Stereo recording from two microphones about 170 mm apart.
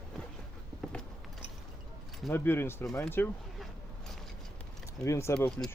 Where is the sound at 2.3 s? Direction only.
15° left (ahead or behind).